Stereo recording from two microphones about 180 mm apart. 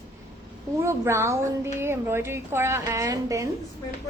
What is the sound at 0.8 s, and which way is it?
A woman's voice, 15° right (ahead or behind).